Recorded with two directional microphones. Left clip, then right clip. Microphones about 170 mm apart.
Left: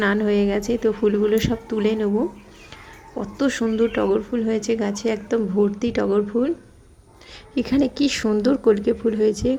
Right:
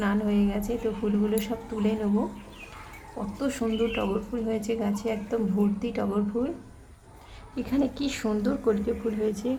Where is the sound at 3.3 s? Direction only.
15° left (ahead or behind).